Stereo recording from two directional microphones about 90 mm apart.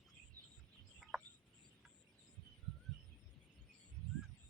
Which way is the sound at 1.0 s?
5° right (ahead or behind).